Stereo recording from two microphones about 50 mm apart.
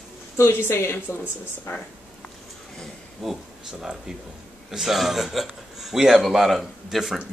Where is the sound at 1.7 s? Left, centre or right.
Left.